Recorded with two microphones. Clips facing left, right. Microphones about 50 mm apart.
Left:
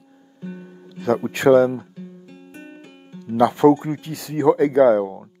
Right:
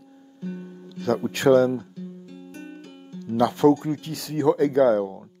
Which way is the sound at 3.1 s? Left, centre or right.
Centre.